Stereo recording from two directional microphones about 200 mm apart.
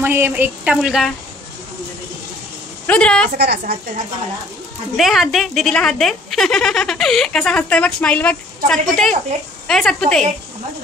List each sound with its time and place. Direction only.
0.0 s speech: 10° right (ahead or behind)
2.9 s speech: 5° left (ahead or behind)
3.3 s a woman's voice: 55° right (ahead or behind)
4.9 s speech: centre (ahead or behind)